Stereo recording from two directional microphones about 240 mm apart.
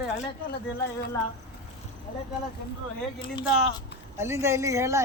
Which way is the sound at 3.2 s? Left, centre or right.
Left.